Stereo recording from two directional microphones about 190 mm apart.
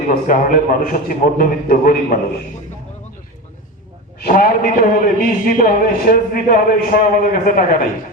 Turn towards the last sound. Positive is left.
turn(degrees=50)  # may be behind; listen again after turning